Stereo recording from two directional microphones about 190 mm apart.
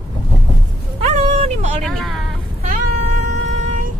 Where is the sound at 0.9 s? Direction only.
35° right (ahead or behind).